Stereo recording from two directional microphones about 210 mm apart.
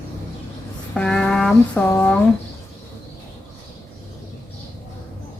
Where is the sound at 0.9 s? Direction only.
5° left (ahead or behind).